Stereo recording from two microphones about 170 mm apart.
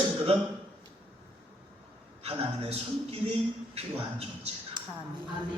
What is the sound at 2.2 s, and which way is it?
A man's voice, 35° right (ahead or behind).